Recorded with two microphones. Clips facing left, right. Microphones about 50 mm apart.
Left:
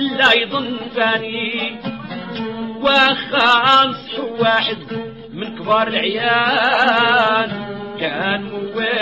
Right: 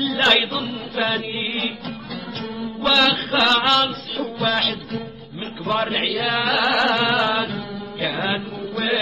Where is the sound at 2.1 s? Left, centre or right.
Left.